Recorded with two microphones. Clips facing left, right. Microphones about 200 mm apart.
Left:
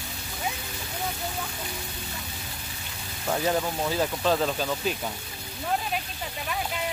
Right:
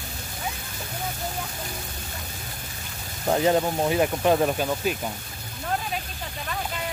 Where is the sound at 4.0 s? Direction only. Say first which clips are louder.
Right 3 dB; 15° right (ahead or behind).